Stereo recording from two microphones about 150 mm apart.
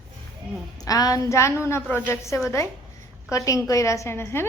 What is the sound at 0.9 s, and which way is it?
A woman's voice, 25° left (ahead or behind).